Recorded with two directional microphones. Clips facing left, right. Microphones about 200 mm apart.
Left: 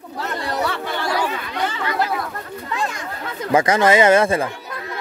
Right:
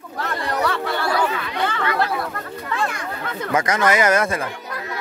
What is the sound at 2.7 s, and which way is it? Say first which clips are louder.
Children playing: right 1 dB; 20° left (ahead or behind).